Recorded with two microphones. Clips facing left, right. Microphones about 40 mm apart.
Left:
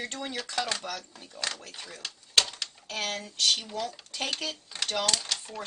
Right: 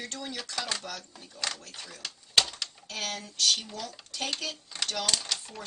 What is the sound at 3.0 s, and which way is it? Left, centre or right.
Speech, left.